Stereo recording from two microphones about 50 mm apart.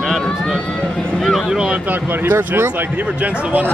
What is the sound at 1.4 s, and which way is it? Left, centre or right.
Speech, centre.